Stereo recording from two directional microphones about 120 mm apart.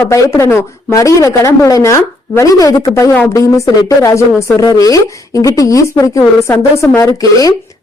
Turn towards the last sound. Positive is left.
turn(degrees=30)  # may be behind; listen again after turning